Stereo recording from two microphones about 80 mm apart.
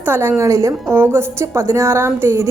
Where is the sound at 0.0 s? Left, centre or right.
Right.